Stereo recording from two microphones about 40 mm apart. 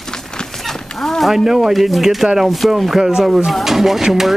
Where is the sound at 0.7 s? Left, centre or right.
Centre.